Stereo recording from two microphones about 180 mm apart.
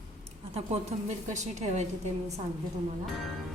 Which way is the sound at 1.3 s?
40° right (ahead or behind).